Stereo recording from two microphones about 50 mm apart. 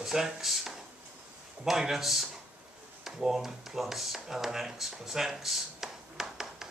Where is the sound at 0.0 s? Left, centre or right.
Centre.